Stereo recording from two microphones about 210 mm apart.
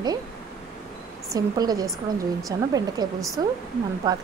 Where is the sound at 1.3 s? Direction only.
20° right (ahead or behind).